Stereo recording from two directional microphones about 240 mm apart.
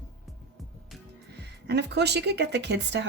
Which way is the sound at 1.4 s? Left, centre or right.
Right.